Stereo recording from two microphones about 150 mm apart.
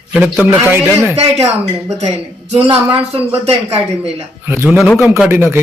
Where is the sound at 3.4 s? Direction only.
45° right (ahead or behind).